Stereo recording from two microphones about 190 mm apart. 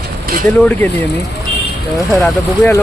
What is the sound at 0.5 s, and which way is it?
Speech, 10° left (ahead or behind).